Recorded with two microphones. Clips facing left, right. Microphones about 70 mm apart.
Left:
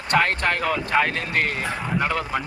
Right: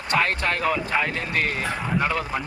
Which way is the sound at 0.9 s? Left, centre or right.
Left.